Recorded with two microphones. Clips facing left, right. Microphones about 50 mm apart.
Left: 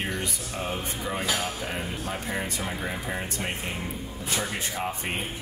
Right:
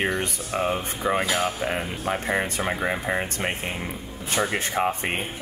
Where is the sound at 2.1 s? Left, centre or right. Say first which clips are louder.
Right 9 dB; right.